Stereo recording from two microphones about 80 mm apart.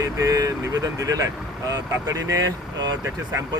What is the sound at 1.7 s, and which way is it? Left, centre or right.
Speech, right.